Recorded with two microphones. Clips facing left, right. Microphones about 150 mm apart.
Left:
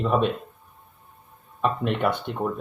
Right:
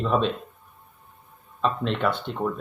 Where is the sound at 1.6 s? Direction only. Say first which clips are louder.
Left 1 dB; 15° left (ahead or behind).